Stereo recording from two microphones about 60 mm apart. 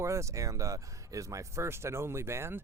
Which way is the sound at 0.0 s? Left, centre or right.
Right.